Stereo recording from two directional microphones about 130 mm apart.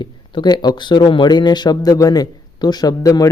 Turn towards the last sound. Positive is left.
turn(degrees=30)  # may be behind; listen again after turning